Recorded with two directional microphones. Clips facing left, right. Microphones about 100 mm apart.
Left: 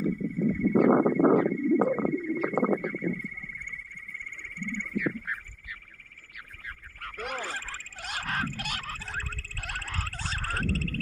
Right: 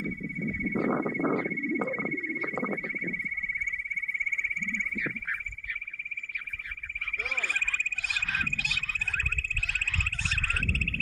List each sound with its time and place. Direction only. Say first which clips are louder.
0.0 s a sound: left 6 dB; 30° left (ahead or behind)
7.1 s frog: left 3 dB; 45° left (ahead or behind)
7.3 s frog: right 1 dB; 25° left (ahead or behind)
8.0 s frog: left 5 dB; 50° left (ahead or behind)
9.0 s a sound: right 2 dB; 25° left (ahead or behind)
9.6 s frog: left 3 dB; 40° left (ahead or behind)